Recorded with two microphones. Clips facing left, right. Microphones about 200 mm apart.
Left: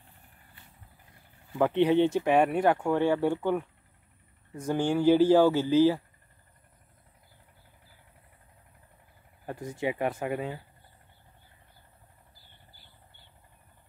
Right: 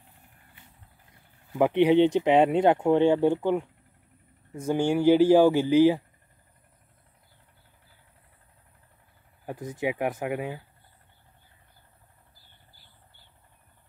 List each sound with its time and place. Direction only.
1.6 s speech: 15° right (ahead or behind)
4.6 s speech: 10° right (ahead or behind)
9.7 s speech: 15° right (ahead or behind)